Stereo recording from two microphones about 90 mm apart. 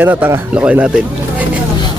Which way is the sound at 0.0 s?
20° right (ahead or behind).